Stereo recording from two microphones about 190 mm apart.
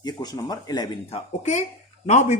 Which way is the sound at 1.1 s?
35° left (ahead or behind).